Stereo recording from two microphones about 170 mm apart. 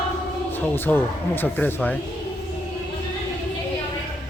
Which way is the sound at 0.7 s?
10° left (ahead or behind).